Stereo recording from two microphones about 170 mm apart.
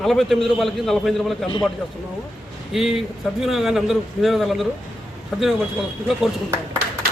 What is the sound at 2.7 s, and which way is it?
A man's voice, centre (ahead or behind).